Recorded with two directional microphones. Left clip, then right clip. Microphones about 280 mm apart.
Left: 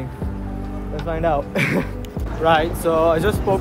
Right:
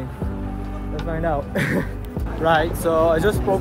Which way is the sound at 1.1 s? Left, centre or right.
Centre.